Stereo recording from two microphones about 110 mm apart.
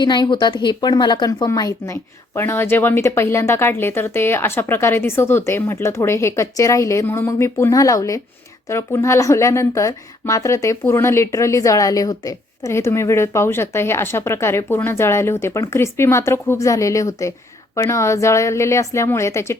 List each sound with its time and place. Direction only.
0.0 s a woman's voice: 40° left (ahead or behind)
1.5 s speech: 30° left (ahead or behind)